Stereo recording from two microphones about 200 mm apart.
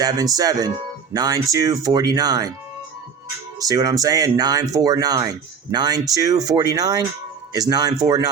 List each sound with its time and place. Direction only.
0.0 s speech: 20° right (ahead or behind)
3.6 s speech: 20° right (ahead or behind)